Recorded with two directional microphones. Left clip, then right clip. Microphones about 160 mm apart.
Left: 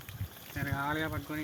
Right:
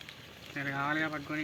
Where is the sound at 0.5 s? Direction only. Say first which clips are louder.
Right 2 dB; 50° left (ahead or behind).